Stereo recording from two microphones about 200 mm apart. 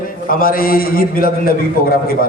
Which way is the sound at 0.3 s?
45° left (ahead or behind).